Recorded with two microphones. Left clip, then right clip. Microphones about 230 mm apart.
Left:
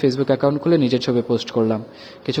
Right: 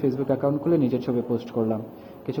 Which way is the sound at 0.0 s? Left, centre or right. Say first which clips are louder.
Left 6 dB; left.